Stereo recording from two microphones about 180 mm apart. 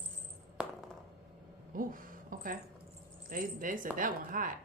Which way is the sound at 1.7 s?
50° right (ahead or behind).